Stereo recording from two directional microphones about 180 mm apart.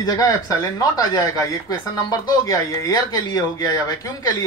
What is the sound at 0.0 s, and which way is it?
Speech, 20° left (ahead or behind).